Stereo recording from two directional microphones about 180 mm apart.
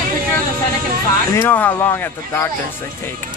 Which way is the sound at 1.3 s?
10° left (ahead or behind).